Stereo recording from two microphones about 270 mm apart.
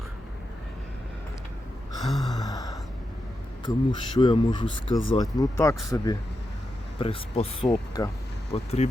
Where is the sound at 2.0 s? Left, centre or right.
Centre.